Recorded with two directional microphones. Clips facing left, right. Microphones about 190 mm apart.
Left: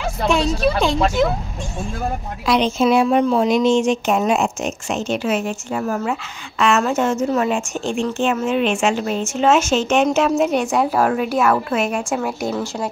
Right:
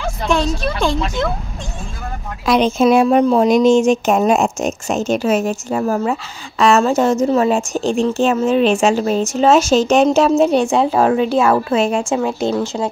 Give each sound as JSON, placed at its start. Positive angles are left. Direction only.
{"t": 0.0, "sound": "a woman's voice", "side_deg": 5}
{"t": 2.4, "sound": "a woman's voice", "side_deg": -45}